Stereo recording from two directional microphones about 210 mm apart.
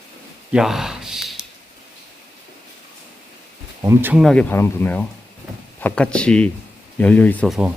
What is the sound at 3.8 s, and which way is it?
Speech, 10° right (ahead or behind).